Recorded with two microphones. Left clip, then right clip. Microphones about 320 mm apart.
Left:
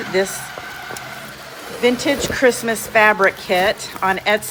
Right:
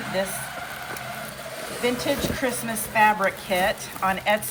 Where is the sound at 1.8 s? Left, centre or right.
Centre.